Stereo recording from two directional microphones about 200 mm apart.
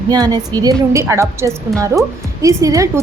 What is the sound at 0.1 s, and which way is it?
A woman's voice, 20° right (ahead or behind).